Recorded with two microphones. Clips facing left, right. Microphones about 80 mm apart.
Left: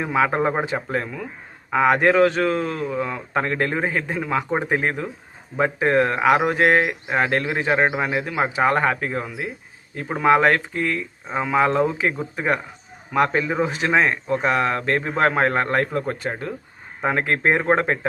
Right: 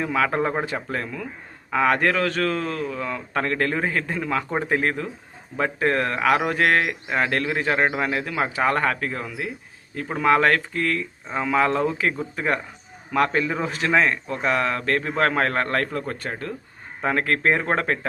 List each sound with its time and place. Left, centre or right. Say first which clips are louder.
0.0 s speech: left 2 dB; centre